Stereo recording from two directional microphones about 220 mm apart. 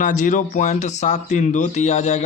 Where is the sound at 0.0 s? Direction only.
35° left (ahead or behind).